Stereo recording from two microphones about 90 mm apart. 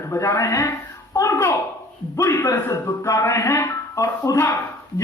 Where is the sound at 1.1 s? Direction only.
35° left (ahead or behind).